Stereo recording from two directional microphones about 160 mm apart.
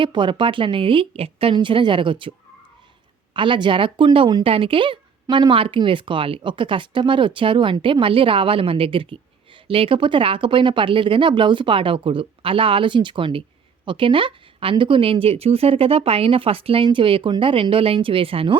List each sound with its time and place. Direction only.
0.0 s speech: 30° right (ahead or behind)
3.3 s speech: 30° right (ahead or behind)